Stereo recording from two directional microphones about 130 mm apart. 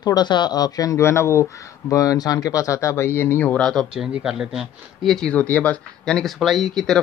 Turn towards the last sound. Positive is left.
turn(degrees=0)  # may be behind; listen again after turning